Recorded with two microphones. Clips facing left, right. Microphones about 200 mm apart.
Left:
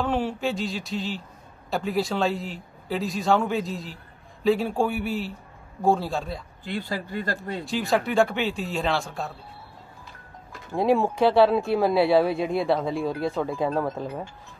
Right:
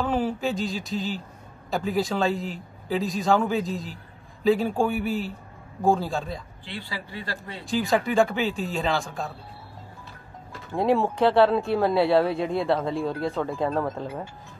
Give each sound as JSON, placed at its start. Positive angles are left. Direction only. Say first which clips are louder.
{"t": 0.0, "sound": "a man's voice", "louder": "even", "side_deg": 0}
{"t": 6.6, "sound": "speech", "louder": "left 6 dB", "side_deg": 45}
{"t": 7.6, "sound": "a man's voice", "louder": "right 2 dB", "side_deg": 0}
{"t": 10.7, "sound": "a man's voice", "louder": "left 1 dB", "side_deg": 5}